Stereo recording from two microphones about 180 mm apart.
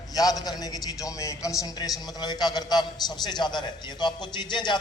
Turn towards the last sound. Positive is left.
turn(degrees=25)  # may be behind; listen again after turning